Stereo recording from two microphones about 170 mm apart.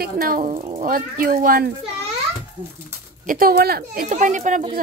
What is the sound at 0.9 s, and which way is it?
Speech, 55° right (ahead or behind).